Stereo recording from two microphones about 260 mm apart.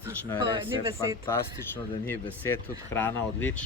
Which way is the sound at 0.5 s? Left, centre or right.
Centre.